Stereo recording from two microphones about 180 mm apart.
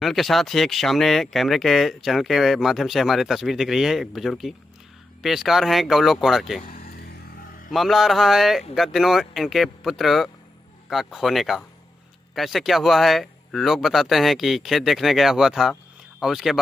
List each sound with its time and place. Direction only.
0.0 s speech: centre (ahead or behind)
6.6 s vehicle: 50° left (ahead or behind)
7.7 s speech: centre (ahead or behind)